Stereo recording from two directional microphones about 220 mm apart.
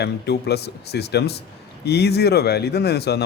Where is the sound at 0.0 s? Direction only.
50° left (ahead or behind).